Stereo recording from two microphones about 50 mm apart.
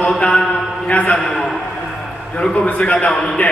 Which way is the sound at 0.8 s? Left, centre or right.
Left.